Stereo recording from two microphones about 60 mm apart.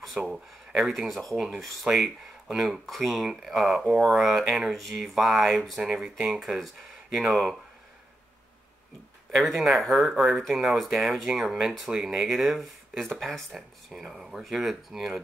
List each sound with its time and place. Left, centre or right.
0.2 s speech: centre
0.7 s speech: centre
9.3 s speech: centre